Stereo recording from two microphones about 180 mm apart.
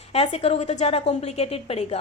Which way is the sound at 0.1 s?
35° left (ahead or behind).